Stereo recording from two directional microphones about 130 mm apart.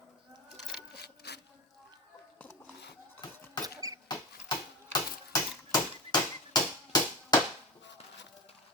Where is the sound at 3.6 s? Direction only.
25° right (ahead or behind).